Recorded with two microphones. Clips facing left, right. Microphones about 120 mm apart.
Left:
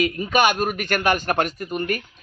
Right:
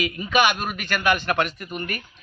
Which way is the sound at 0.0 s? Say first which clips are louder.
Left 2 dB; 40° left (ahead or behind).